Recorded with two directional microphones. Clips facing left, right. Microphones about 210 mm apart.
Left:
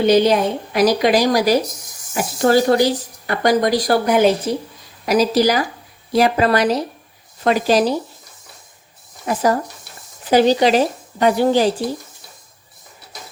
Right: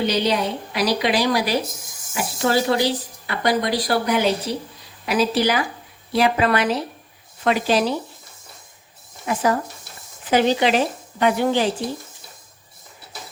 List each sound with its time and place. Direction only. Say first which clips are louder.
0.0 s speech: left 7 dB; 50° left (ahead or behind)
9.2 s speech: left 3 dB; 40° left (ahead or behind)